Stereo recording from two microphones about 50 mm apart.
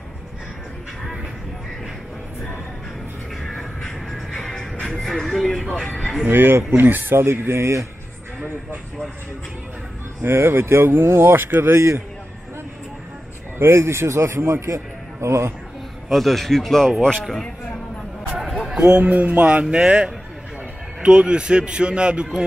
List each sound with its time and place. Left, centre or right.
3.4 s music: centre
6.2 s speech: right
10.2 s speech: right
13.6 s a man's voice: right
16.1 s speech: centre
18.9 s a man's voice: right